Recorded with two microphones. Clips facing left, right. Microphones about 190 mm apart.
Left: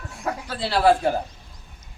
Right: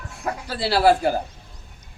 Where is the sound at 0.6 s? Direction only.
5° right (ahead or behind).